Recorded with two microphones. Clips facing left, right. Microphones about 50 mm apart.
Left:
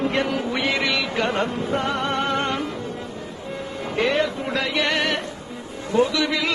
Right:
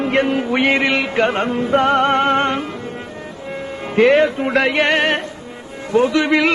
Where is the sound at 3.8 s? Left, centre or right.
Right.